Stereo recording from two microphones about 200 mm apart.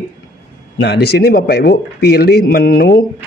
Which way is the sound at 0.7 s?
55° left (ahead or behind).